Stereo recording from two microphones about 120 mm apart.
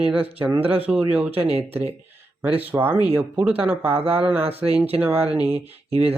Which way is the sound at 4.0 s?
55° right (ahead or behind).